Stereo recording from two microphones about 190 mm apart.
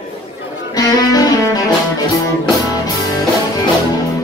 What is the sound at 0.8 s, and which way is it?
Music, 20° left (ahead or behind).